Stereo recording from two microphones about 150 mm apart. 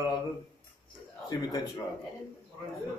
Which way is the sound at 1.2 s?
25° left (ahead or behind).